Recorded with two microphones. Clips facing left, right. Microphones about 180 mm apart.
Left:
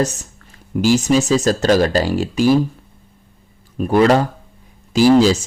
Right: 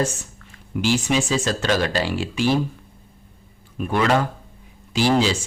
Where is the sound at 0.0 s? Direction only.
40° left (ahead or behind).